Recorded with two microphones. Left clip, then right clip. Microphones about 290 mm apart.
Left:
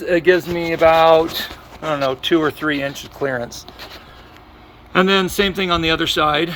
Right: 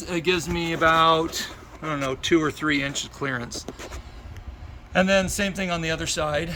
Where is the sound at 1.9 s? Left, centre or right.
Centre.